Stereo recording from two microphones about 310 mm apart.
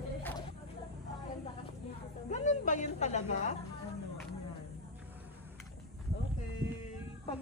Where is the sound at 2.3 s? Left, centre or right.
Left.